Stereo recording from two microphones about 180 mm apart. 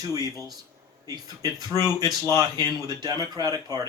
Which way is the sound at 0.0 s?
20° right (ahead or behind).